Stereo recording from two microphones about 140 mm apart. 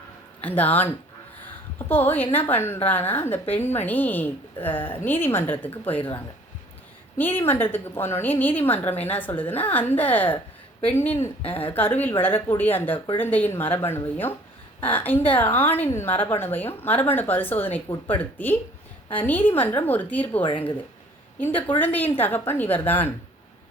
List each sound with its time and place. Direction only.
0.4 s a woman's voice: 10° left (ahead or behind)
7.2 s a woman's voice: 15° left (ahead or behind)